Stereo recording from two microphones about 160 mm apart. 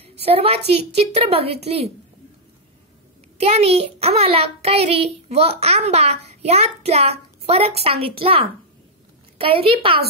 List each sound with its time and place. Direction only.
0.2 s a woman's voice: 40° right (ahead or behind)
3.3 s a child's voice: 40° right (ahead or behind)